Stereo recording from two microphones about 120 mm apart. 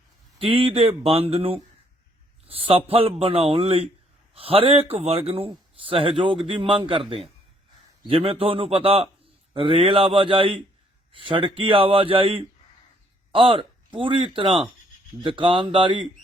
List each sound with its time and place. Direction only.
0.3 s a man's voice: 50° right (ahead or behind)